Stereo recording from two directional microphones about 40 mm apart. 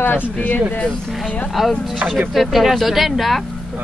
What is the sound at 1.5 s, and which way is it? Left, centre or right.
Speech, centre.